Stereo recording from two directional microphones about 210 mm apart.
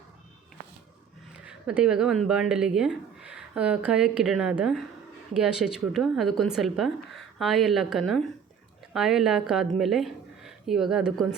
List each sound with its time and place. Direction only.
1.5 s a woman's voice: 5° right (ahead or behind)